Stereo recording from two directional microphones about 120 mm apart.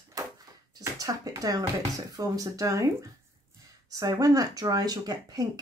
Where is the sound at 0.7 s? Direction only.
30° right (ahead or behind).